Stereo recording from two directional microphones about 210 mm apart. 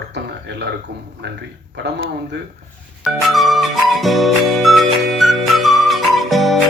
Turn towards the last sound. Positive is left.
turn(degrees=0)  # may be behind; listen again after turning